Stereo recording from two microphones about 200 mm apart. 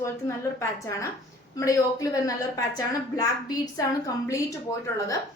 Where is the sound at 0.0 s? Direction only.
15° left (ahead or behind).